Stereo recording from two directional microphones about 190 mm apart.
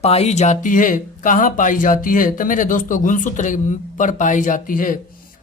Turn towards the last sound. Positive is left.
turn(degrees=45)  # may be behind; listen again after turning